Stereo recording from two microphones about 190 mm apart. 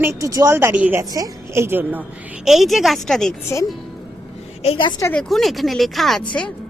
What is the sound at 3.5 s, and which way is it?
Speech, 15° left (ahead or behind).